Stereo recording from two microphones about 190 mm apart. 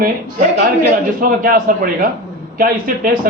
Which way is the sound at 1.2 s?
50° right (ahead or behind).